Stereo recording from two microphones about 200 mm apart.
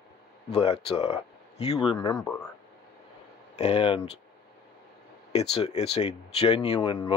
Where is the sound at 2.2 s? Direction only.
5° left (ahead or behind).